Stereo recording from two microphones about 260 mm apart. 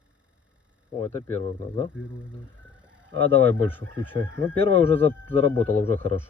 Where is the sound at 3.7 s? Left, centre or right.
Centre.